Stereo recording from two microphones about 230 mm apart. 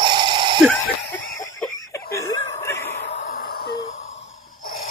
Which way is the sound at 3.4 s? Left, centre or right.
Left.